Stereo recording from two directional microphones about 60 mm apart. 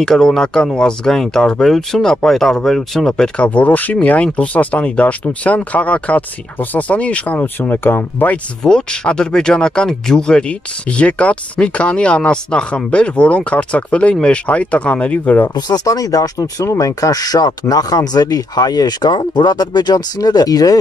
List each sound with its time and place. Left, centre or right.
0.0 s speech: centre
3.4 s speech: left
7.6 s speech: left
8.6 s speech: centre
15.7 s speech: left
16.6 s speech: left
20.2 s speech: left